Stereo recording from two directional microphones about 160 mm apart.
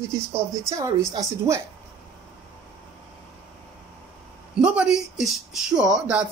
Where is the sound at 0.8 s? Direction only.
20° right (ahead or behind).